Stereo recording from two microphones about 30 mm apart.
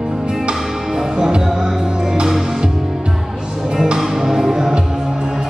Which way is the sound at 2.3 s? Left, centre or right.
Centre.